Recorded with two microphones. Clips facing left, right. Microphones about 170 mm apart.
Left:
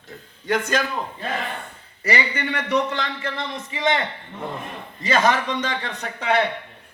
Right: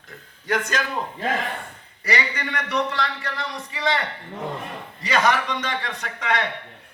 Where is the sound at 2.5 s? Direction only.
30° left (ahead or behind).